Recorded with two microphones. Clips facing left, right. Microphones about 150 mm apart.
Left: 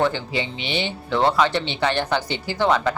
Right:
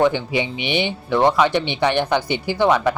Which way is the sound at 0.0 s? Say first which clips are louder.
Right 4 dB; 15° right (ahead or behind).